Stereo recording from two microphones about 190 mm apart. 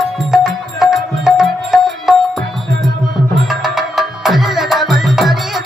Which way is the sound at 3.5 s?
Centre (ahead or behind).